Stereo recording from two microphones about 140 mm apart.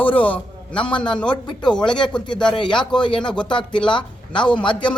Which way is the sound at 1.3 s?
30° left (ahead or behind).